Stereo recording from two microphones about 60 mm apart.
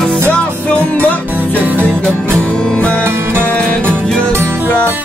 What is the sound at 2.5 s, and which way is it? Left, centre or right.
Music, centre.